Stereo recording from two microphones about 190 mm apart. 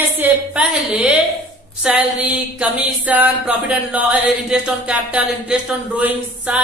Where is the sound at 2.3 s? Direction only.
5° right (ahead or behind).